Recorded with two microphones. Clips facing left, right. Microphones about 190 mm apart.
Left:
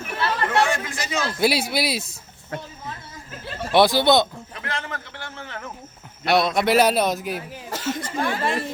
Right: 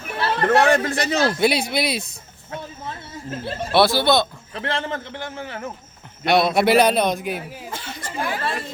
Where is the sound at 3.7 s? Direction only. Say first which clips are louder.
Left 1 dB; 15° left (ahead or behind).